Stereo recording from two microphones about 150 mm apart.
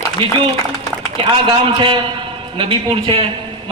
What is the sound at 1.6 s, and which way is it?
A man's voice, 35° right (ahead or behind).